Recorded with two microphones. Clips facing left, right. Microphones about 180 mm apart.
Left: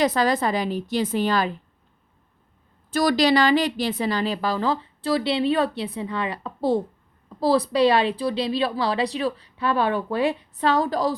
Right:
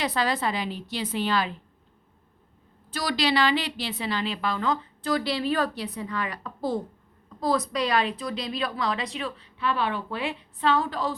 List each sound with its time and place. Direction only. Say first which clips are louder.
0.0 s a woman's voice: left 6 dB; 45° left (ahead or behind)
2.9 s a woman's voice: left 7 dB; 45° left (ahead or behind)